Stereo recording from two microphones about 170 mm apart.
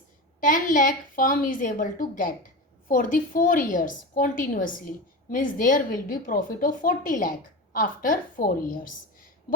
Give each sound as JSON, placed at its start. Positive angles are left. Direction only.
{"t": 0.3, "sound": "a woman's voice", "side_deg": 50}